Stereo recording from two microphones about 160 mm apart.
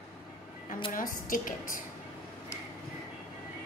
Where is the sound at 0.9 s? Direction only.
55° left (ahead or behind).